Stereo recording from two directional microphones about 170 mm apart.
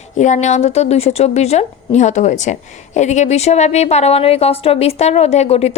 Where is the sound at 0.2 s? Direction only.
45° left (ahead or behind).